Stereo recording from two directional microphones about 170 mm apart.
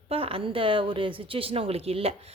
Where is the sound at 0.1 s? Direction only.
35° right (ahead or behind).